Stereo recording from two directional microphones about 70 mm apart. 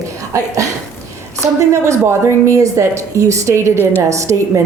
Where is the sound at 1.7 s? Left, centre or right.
Right.